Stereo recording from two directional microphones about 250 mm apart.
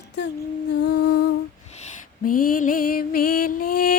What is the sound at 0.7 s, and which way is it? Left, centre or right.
Music, left.